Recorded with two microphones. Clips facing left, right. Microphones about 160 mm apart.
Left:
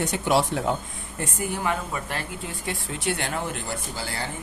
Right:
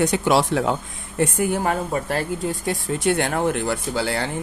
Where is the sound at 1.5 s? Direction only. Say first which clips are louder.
Right 6 dB; 40° right (ahead or behind); by 4.3 s 80° right.